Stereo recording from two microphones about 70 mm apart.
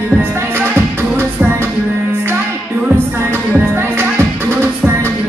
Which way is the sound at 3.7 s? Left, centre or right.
Right.